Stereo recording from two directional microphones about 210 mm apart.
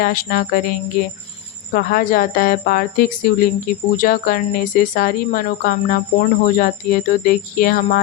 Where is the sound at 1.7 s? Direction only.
45° left (ahead or behind).